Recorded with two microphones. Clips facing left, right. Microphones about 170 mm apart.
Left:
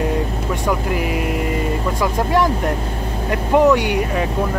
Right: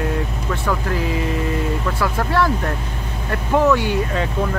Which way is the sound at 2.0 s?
15° left (ahead or behind).